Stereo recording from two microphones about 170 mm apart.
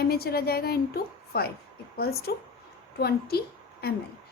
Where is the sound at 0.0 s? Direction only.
65° left (ahead or behind).